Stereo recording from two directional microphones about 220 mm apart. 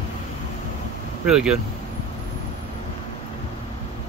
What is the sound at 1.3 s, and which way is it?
Speech, 5° right (ahead or behind).